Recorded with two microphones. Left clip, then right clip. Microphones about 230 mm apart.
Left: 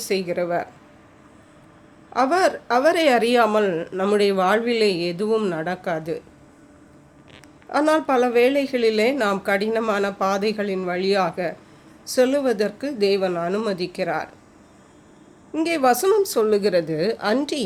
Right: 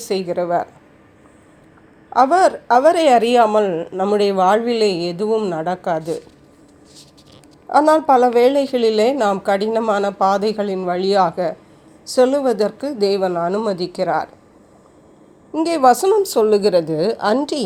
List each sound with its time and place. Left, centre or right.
0.0 s speech: centre
2.1 s speech: centre
7.7 s a woman's voice: centre
15.5 s a woman's voice: centre